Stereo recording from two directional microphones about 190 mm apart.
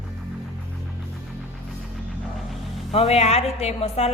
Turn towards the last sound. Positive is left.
turn(degrees=35)  # may be behind; listen again after turning